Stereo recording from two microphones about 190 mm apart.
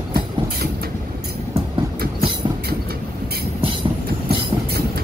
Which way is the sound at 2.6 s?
55° right (ahead or behind).